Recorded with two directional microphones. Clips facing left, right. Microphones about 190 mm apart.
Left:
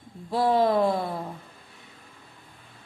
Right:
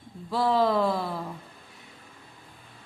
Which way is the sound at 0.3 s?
20° left (ahead or behind).